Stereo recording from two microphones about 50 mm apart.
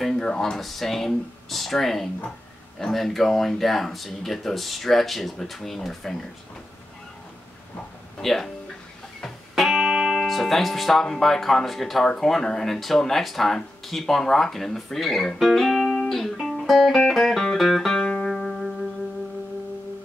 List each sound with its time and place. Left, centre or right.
0.0 s speech: centre
0.6 s speech: centre
8.2 s speech: centre
9.6 s speech: centre
18.2 s music: centre